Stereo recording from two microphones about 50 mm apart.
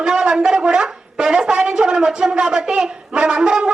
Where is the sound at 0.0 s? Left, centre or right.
Centre.